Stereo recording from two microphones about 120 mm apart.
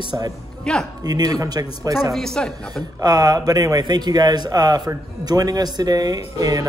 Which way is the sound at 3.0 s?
35° right (ahead or behind).